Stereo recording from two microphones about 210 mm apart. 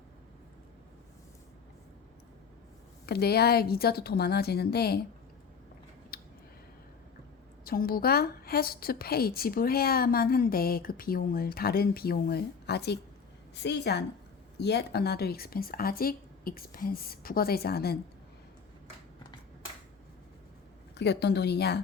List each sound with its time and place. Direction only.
3.1 s a woman's voice: 50° left (ahead or behind)
6.1 s a sound: 45° left (ahead or behind)
7.6 s a woman's voice: 45° left (ahead or behind)
20.9 s a woman's voice: 55° left (ahead or behind)